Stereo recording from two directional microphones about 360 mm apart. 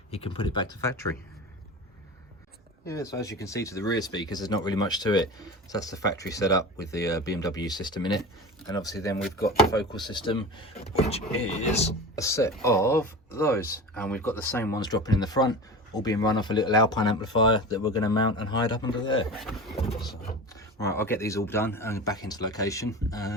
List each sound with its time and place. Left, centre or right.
0.1 s speech: centre
2.8 s speech: centre
9.0 s speech: centre
10.1 s speech: centre